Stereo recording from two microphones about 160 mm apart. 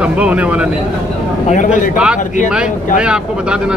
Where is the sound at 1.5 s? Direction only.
55° left (ahead or behind).